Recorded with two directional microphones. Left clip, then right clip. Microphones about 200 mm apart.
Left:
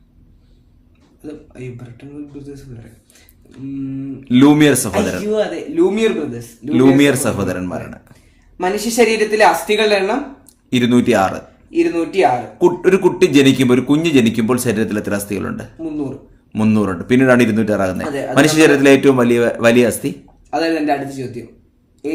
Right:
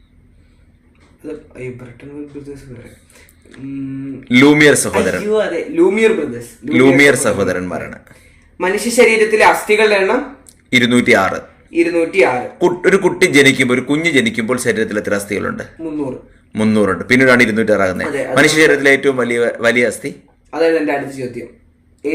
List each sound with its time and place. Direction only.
1.2 s speech: 20° left (ahead or behind)
3.5 s a sound: 20° left (ahead or behind)
4.2 s a man's voice: 20° left (ahead or behind)